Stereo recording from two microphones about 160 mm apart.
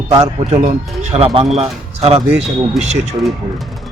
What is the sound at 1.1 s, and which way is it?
Speech, 35° right (ahead or behind).